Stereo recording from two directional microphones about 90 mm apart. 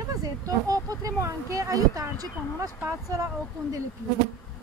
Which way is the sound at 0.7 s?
40° right (ahead or behind).